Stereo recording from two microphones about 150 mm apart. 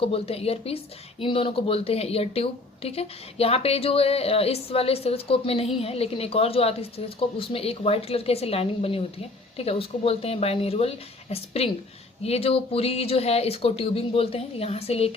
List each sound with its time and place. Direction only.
0.0 s a woman's voice: 40° left (ahead or behind)